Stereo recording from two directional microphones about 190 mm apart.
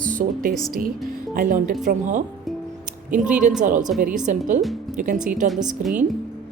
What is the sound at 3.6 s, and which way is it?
Speech, 40° right (ahead or behind).